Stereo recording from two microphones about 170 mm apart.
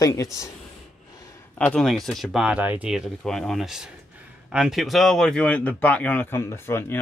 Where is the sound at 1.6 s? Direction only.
5° left (ahead or behind).